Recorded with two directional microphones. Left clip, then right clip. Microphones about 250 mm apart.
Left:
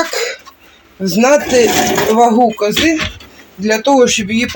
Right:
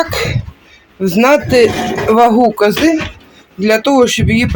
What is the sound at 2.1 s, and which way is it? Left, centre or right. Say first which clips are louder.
Speech: right 3 dB; centre.